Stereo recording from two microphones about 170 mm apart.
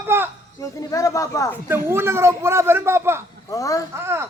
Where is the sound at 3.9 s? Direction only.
15° right (ahead or behind).